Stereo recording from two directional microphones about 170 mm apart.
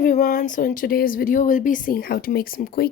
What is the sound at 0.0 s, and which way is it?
Speech, 50° left (ahead or behind).